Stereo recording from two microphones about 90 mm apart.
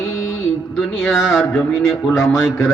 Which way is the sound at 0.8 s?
5° left (ahead or behind).